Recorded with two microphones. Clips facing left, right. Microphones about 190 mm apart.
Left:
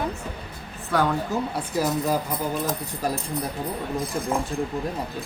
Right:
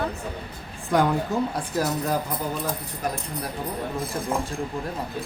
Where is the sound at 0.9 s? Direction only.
15° right (ahead or behind).